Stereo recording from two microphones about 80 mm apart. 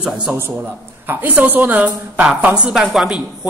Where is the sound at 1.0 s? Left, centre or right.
Right.